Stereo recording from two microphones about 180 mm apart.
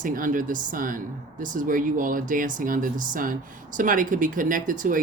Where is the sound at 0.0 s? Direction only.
50° right (ahead or behind).